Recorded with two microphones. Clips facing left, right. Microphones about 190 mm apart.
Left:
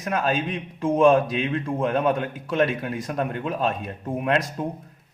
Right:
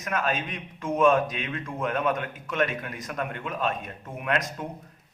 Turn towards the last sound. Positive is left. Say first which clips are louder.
# left 5 dB
turn(degrees=30)  # may be behind; listen again after turning